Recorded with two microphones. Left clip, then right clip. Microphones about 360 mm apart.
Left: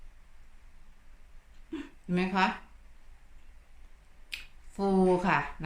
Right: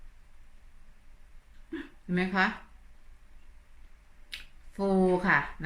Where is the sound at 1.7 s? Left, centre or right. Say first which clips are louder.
Right 1 dB; centre.